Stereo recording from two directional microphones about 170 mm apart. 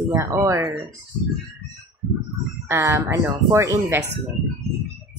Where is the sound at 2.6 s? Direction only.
15° right (ahead or behind).